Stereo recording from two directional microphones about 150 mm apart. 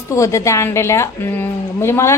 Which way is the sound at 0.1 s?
20° left (ahead or behind).